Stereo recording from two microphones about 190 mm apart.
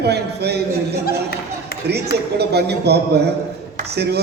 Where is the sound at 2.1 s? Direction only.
60° right (ahead or behind).